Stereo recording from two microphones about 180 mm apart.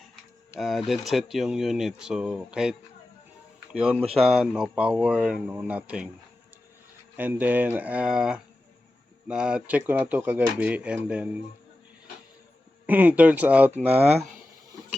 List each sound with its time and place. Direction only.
0.6 s speech: centre (ahead or behind)
7.2 s speech: 10° right (ahead or behind)
12.8 s speech: 10° right (ahead or behind)
13.9 s speech: 35° right (ahead or behind)